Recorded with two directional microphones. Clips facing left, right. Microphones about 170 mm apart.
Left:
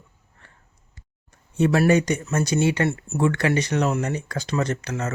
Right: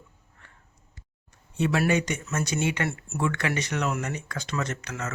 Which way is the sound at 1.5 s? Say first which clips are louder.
Left 6 dB; 45° left (ahead or behind).